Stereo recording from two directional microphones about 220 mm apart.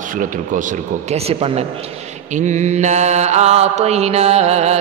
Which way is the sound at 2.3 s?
35° right (ahead or behind).